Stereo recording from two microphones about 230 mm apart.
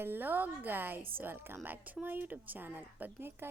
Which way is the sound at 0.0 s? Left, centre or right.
Centre.